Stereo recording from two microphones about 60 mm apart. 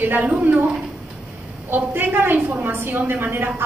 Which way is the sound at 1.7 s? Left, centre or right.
Right.